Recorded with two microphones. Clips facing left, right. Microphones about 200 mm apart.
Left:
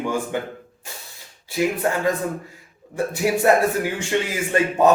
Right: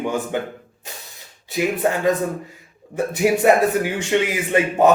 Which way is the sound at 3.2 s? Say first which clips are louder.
Right 2 dB; 20° right (ahead or behind).